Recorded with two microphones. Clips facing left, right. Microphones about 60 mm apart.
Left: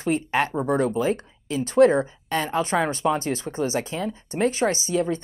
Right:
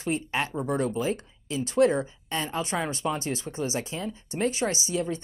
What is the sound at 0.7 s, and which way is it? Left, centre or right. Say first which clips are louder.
Speech: left 4 dB; left.